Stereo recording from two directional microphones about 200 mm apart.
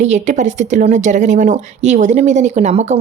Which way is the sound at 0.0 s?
35° right (ahead or behind).